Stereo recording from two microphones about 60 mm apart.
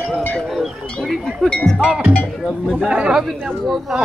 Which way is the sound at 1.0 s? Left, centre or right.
Centre.